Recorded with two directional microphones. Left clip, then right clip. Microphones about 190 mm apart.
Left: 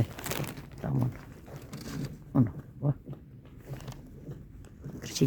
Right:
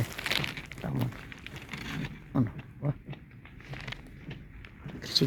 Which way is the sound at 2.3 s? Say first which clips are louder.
Left 3 dB; 20° left (ahead or behind).